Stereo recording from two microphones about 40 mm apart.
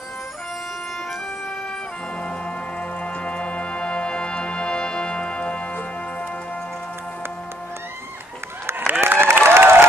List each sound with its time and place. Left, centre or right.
3.0 s music: left
8.6 s applause: right